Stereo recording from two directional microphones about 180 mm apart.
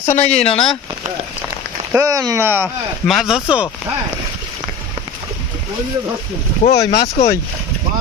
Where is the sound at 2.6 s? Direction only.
Centre (ahead or behind).